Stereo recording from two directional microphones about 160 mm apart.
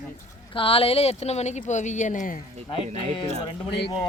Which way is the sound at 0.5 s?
35° left (ahead or behind).